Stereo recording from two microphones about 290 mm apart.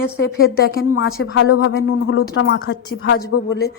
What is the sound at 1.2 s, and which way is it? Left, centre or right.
A woman's voice, left.